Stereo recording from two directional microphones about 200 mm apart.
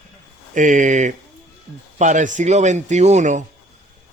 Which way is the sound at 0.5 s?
40° right (ahead or behind).